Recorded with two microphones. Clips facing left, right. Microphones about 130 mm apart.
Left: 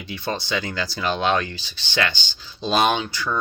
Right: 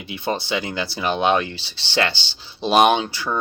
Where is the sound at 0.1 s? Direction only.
25° right (ahead or behind).